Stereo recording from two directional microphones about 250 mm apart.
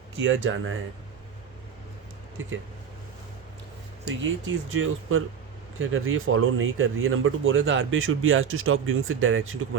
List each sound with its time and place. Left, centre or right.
0.2 s speech: right
4.2 s speech: right